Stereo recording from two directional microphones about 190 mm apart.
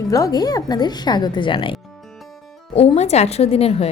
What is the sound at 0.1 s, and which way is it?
A woman's voice, 20° left (ahead or behind).